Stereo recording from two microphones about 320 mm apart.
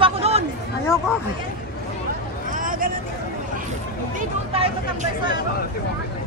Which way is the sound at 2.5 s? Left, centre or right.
Right.